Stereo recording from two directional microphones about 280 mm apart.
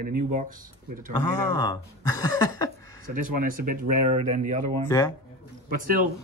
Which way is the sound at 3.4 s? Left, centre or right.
Right.